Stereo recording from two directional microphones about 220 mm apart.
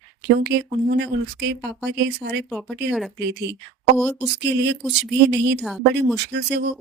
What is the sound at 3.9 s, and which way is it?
Speech, 5° left (ahead or behind).